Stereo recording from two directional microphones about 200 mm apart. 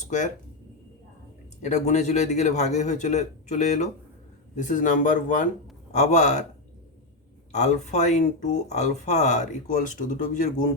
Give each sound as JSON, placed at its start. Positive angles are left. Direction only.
{"t": 1.6, "sound": "speech", "side_deg": 35}
{"t": 7.5, "sound": "speech", "side_deg": 35}